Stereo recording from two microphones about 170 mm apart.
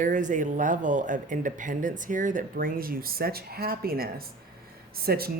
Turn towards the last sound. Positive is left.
turn(degrees=-65)  # may be behind; listen again after turning